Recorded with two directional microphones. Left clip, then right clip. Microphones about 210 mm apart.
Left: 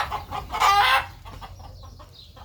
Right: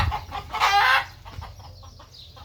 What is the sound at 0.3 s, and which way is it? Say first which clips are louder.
Chicken: left 3 dB; 55° left (ahead or behind).